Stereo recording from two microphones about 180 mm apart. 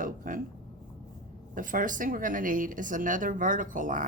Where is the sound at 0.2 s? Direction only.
45° right (ahead or behind).